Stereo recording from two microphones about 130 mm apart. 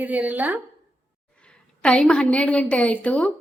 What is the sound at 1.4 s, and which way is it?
A woman's voice, 10° left (ahead or behind).